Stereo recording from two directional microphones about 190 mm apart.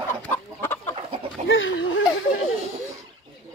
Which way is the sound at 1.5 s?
85° left.